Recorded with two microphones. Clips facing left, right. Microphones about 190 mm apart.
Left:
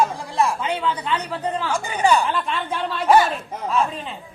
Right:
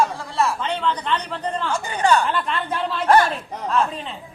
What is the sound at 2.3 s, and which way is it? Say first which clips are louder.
A woman's voice: even; centre (ahead or behind).